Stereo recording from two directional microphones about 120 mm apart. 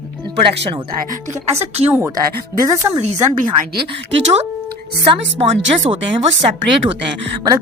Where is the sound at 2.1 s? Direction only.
30° right (ahead or behind).